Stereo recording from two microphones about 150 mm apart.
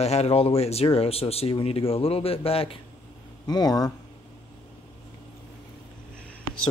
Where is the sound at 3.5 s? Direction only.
25° left (ahead or behind).